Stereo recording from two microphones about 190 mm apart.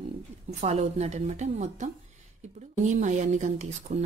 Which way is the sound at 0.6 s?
35° right (ahead or behind).